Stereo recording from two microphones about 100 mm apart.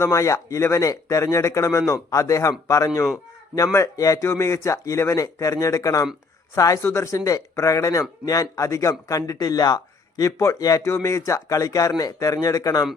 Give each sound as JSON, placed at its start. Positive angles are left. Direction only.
{"t": 0.0, "sound": "speech", "side_deg": 30}